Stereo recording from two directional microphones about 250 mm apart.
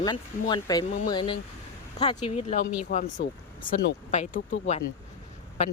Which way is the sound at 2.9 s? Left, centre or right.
Left.